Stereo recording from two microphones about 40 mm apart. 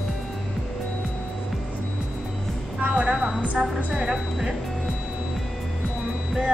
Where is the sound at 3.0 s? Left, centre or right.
Right.